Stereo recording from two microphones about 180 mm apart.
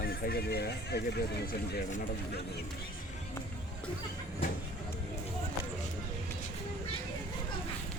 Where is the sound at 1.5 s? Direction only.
50° left (ahead or behind).